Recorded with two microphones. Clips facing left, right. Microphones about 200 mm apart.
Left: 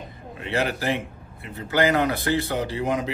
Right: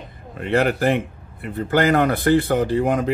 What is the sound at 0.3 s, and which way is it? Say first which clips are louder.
A man's voice: right 6 dB; 55° right (ahead or behind).